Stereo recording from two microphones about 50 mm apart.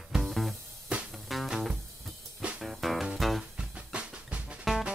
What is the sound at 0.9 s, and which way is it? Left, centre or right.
Music, right.